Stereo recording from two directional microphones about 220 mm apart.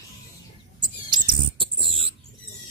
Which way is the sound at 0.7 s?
20° right (ahead or behind).